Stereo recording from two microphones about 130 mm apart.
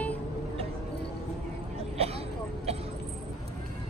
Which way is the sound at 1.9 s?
50° right (ahead or behind).